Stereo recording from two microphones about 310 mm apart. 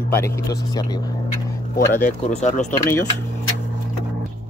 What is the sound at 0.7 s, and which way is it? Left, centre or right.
Vehicle, centre.